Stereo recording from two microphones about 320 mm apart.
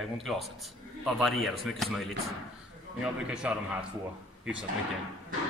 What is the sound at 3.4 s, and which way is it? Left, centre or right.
Speech, centre.